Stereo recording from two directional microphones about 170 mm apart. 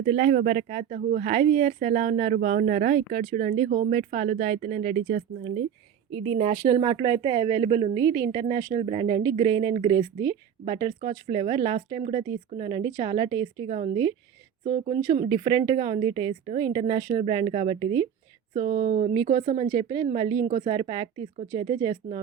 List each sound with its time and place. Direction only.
0.0 s a woman's voice: 40° right (ahead or behind)
7.9 s a woman's voice: 20° right (ahead or behind)
8.3 s a woman's voice: 30° right (ahead or behind)
13.7 s speech: 40° right (ahead or behind)
15.3 s a woman's voice: 25° right (ahead or behind)
17.1 s a woman's voice: 35° right (ahead or behind)